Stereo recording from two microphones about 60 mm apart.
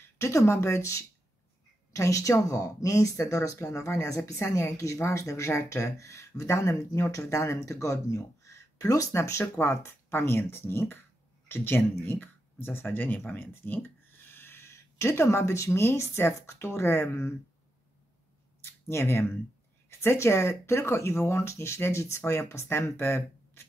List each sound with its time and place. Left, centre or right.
0.2 s speech: left
9.1 s speech: left
18.9 s speech: left